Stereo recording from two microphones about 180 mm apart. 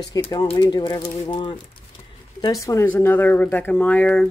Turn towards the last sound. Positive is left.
turn(degrees=5)  # may be behind; listen again after turning